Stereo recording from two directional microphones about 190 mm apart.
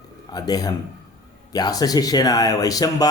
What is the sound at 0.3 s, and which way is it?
Speech, 20° left (ahead or behind).